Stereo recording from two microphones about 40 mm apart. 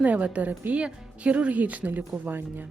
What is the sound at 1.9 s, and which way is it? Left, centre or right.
Speech, right.